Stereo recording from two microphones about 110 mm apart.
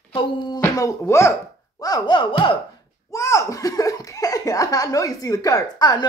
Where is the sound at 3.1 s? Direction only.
30° left (ahead or behind).